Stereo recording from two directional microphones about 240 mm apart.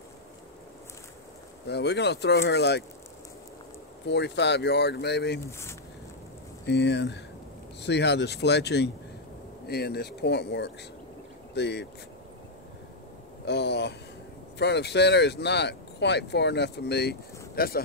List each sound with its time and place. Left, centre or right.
1.7 s speech: left
4.1 s speech: left
5.4 s speech: centre
6.6 s speech: left
13.5 s speech: left